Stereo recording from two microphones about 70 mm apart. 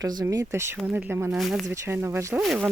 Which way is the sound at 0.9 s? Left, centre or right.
Right.